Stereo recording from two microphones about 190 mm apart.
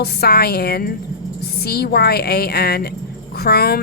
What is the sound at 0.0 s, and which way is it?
Speech, 55° left (ahead or behind).